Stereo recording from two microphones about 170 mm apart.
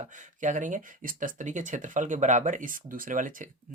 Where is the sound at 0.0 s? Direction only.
45° right (ahead or behind).